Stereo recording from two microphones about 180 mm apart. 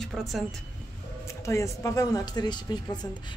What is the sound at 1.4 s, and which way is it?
Speech, 15° left (ahead or behind).